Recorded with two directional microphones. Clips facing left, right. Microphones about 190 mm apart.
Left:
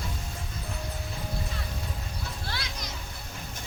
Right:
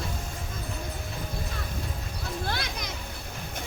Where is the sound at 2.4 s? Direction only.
55° right (ahead or behind).